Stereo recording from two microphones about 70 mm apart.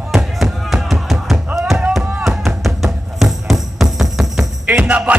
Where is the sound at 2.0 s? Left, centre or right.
Centre.